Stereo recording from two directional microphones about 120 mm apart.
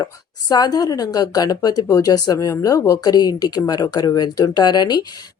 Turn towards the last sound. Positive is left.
turn(degrees=35)  # may be behind; listen again after turning